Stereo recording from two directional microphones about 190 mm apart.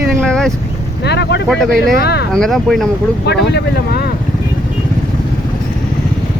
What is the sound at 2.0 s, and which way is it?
Speech, 60° left (ahead or behind).